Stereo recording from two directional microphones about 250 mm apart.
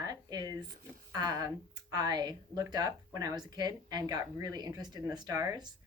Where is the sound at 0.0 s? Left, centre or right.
Centre.